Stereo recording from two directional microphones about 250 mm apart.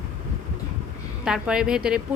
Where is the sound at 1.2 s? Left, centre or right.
Centre.